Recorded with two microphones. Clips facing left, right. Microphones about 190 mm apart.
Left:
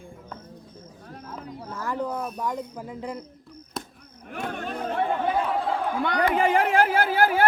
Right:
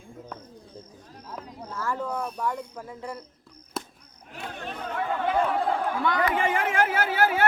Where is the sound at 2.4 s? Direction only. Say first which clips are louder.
Left 1 dB; 15° left (ahead or behind).